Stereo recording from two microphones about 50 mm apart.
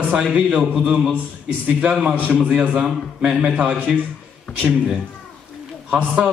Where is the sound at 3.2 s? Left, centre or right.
Centre.